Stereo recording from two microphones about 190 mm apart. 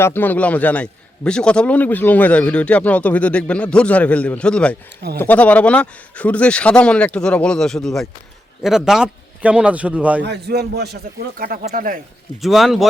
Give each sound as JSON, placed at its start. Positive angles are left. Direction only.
{"t": 0.0, "sound": "a man's voice", "side_deg": 10}
{"t": 10.2, "sound": "speech", "side_deg": -60}
{"t": 12.4, "sound": "speech", "side_deg": 0}